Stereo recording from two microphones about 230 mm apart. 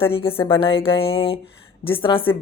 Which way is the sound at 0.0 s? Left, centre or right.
Left.